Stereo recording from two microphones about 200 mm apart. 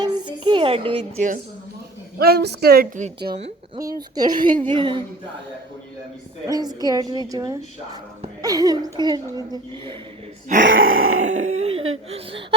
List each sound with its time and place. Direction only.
0.0 s a sound: 25° right (ahead or behind)
2.1 s a woman's voice: 50° right (ahead or behind)
3.3 s a woman's voice: 30° right (ahead or behind)
6.5 s a woman's voice: 20° right (ahead or behind)
10.6 s groan: 80° right
11.3 s a sound: 30° right (ahead or behind)
12.1 s a woman's voice: 30° right (ahead or behind)